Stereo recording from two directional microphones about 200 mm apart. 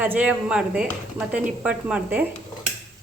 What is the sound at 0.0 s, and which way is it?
Speech, 5° right (ahead or behind).